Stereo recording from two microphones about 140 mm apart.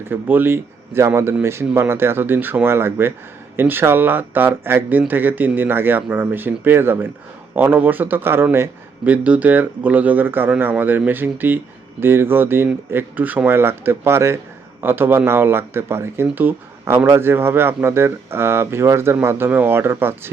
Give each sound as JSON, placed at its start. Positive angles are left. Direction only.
{"t": 0.1, "sound": "a man's voice", "side_deg": -15}